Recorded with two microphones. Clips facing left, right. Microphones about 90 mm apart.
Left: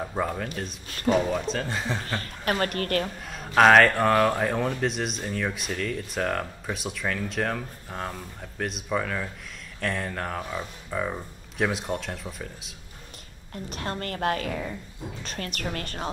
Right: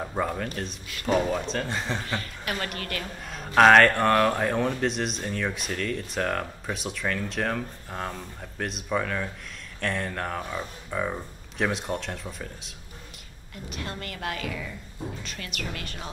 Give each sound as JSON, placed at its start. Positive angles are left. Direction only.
{"t": 0.0, "sound": "speech", "side_deg": 0}
{"t": 2.0, "sound": "a woman's voice", "side_deg": 35}
{"t": 3.3, "sound": "speech", "side_deg": 0}
{"t": 13.7, "sound": "a woman's voice", "side_deg": 40}